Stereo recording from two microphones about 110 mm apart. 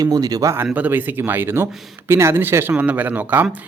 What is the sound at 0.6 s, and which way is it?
A man's voice, 15° right (ahead or behind).